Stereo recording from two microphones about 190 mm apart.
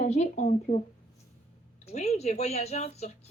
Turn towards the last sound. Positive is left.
turn(degrees=35)  # may be behind; listen again after turning